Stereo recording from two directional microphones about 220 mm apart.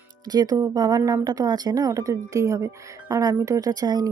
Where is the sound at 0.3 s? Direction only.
15° right (ahead or behind).